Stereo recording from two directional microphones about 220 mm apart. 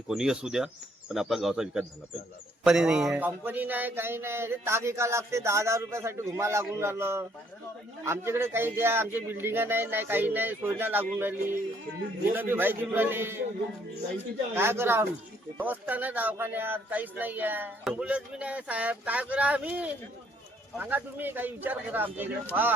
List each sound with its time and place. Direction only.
0.1 s speech: 5° right (ahead or behind)
14.5 s speech: 10° right (ahead or behind)